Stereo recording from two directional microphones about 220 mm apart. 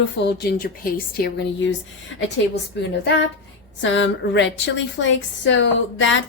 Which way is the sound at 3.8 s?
55° left (ahead or behind).